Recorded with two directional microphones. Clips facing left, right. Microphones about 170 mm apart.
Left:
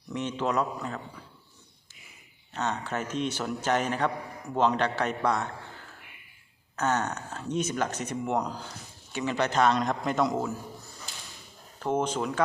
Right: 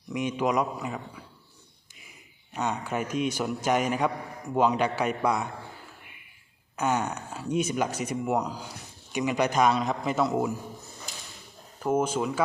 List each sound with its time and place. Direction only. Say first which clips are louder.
0.1 s a man's voice: right 2 dB; 10° right (ahead or behind)
2.5 s a man's voice: right 1 dB; 10° right (ahead or behind)
6.7 s a man's voice: right 1 dB; 10° right (ahead or behind)
11.8 s a man's voice: right 2 dB; 5° right (ahead or behind)